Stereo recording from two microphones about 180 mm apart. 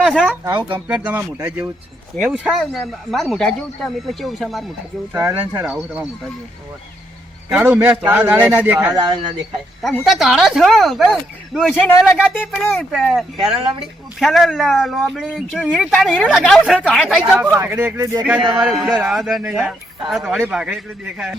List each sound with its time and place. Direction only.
0.0 s speech: 5° left (ahead or behind)
0.4 s speech: 10° right (ahead or behind)
7.5 s speech: 10° right (ahead or behind)
8.9 s a man's voice: 25° right (ahead or behind)
9.8 s speech: centre (ahead or behind)
11.7 s a man's voice: 15° left (ahead or behind)
12.7 s speech: centre (ahead or behind)
14.2 s speech: centre (ahead or behind); by 18.3 s 15° right (ahead or behind)
18.6 s speech: 5° right (ahead or behind)